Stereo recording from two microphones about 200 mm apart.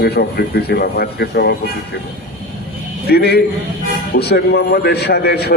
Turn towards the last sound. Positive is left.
turn(degrees=55)  # may be behind; listen again after turning